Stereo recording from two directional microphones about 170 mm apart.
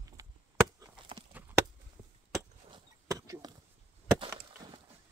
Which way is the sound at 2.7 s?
20° right (ahead or behind).